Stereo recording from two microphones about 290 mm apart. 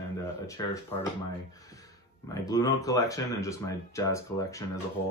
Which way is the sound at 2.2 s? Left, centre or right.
Centre.